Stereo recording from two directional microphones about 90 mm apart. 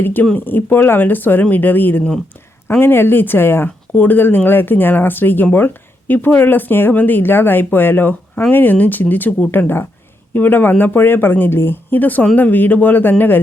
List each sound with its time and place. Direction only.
0.0 s speech: 20° left (ahead or behind)